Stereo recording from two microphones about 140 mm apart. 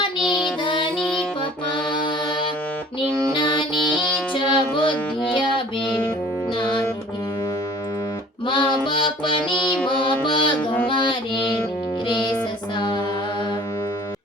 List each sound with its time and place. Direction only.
0.3 s music: 5° right (ahead or behind)
3.3 s music: 35° left (ahead or behind)
8.4 s music: 35° left (ahead or behind)
12.0 s music: 30° left (ahead or behind)